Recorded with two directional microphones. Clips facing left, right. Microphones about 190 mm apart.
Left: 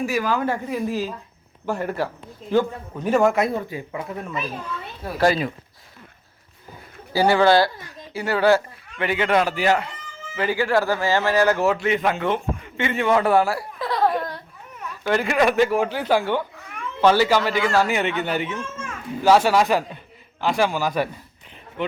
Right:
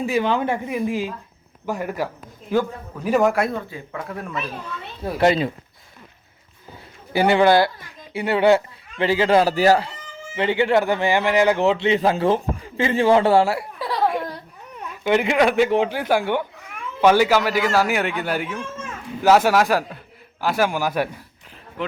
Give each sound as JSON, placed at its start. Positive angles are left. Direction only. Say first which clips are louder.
{"t": 0.0, "sound": "speech", "louder": "right 2 dB", "side_deg": -25}
{"t": 3.2, "sound": "a child's voice", "louder": "even", "side_deg": 0}
{"t": 3.5, "sound": "speech", "louder": "left 2 dB", "side_deg": 15}
{"t": 4.2, "sound": "a child's voice", "louder": "even", "side_deg": 0}
{"t": 5.1, "sound": "speech", "louder": "right 2 dB", "side_deg": -25}
{"t": 7.1, "sound": "speech", "louder": "right 1 dB", "side_deg": -20}
{"t": 10.3, "sound": "speech", "louder": "right 2 dB", "side_deg": -25}
{"t": 13.7, "sound": "a sound", "louder": "left 3 dB", "side_deg": -10}
{"t": 15.0, "sound": "speech", "louder": "right 2 dB", "side_deg": -20}